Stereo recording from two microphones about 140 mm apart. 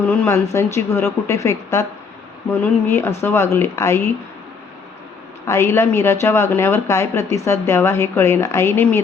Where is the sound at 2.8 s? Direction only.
20° left (ahead or behind).